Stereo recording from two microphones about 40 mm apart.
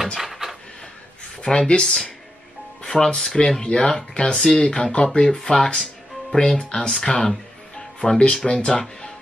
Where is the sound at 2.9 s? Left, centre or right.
Centre.